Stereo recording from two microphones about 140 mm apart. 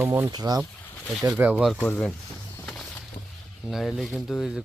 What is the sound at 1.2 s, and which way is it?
Speech, 10° right (ahead or behind).